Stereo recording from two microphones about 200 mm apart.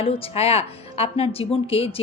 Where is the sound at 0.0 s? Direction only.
30° left (ahead or behind).